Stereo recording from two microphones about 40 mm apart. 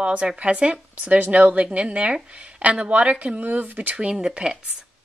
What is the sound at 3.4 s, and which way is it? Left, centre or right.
Speech, right.